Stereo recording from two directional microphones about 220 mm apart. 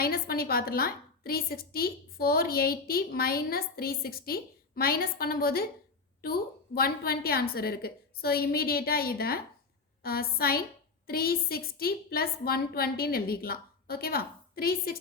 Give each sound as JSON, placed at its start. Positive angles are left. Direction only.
{"t": 0.0, "sound": "a woman's voice", "side_deg": 40}